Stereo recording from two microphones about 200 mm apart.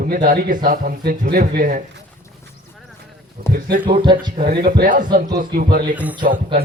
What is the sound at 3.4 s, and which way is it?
Speech, 50° right (ahead or behind).